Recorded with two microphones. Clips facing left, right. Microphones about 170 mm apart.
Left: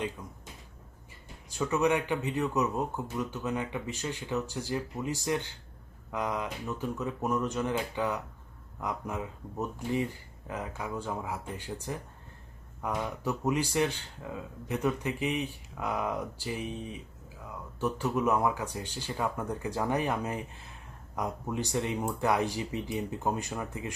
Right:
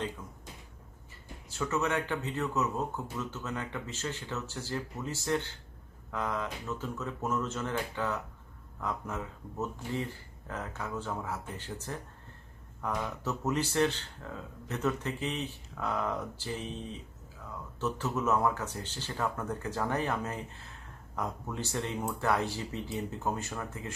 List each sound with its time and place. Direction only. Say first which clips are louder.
1.5 s speech: left 4 dB; 15° left (ahead or behind)